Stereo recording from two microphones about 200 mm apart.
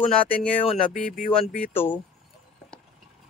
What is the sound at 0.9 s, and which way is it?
Speech, 45° left (ahead or behind).